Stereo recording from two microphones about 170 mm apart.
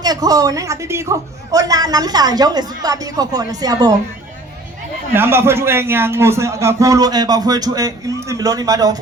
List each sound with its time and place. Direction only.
0.0 s a man's voice: 20° right (ahead or behind)
5.1 s a man's voice: 15° right (ahead or behind)